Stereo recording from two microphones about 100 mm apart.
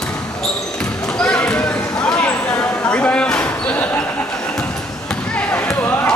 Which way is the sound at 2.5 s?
30° left (ahead or behind).